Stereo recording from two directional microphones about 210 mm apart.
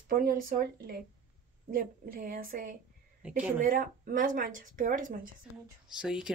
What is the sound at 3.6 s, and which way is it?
Speech, 40° right (ahead or behind).